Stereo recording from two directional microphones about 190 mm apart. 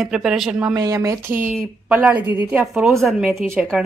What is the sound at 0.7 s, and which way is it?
A woman's voice, 20° right (ahead or behind).